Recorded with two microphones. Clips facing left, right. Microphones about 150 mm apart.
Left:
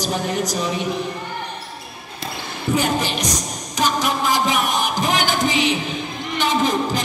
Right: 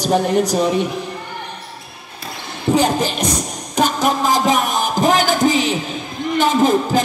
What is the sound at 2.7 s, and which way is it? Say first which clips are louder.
Speech: right 4 dB; 35° right (ahead or behind).